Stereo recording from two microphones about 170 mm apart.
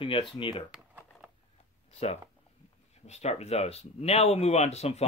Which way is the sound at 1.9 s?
40° left (ahead or behind).